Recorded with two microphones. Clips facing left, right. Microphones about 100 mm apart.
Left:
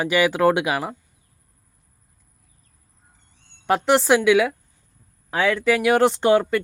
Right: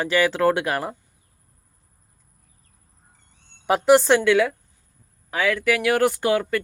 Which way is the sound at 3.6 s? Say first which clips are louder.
Right 2 dB; 5° right (ahead or behind).